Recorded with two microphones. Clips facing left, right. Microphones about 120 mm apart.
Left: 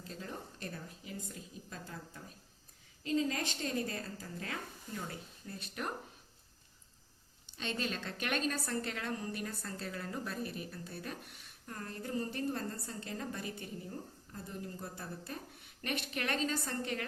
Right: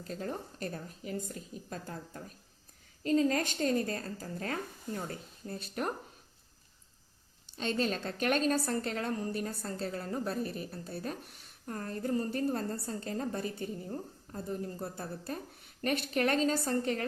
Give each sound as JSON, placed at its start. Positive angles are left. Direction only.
{"t": 0.1, "sound": "a woman's voice", "side_deg": -45}
{"t": 7.4, "sound": "a woman's voice", "side_deg": -35}